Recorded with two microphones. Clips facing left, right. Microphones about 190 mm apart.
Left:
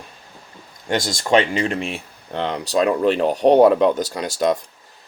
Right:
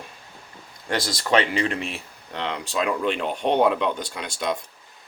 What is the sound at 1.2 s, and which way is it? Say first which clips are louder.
Speech: left 4 dB; 25° left (ahead or behind).